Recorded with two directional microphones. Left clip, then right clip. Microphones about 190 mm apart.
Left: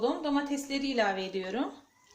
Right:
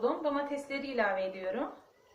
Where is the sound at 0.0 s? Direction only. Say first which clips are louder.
Left 1 dB; 75° left (ahead or behind).